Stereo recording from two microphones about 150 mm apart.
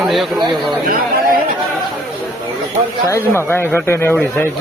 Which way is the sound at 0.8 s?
65° right (ahead or behind).